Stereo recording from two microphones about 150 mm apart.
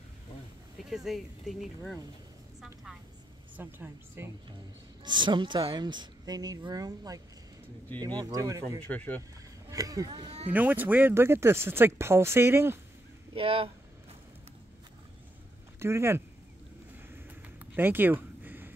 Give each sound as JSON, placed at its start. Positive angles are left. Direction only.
{"t": 0.7, "sound": "speech", "side_deg": 0}
{"t": 2.6, "sound": "vehicle", "side_deg": 0}
{"t": 3.5, "sound": "speech", "side_deg": -10}
{"t": 5.0, "sound": "speech", "side_deg": -30}
{"t": 8.8, "sound": "speech", "side_deg": 10}
{"t": 9.7, "sound": "speech", "side_deg": -25}
{"t": 10.5, "sound": "speech", "side_deg": -10}
{"t": 13.3, "sound": "speech", "side_deg": -40}
{"t": 15.8, "sound": "speech", "side_deg": -15}
{"t": 17.7, "sound": "a sound", "side_deg": -15}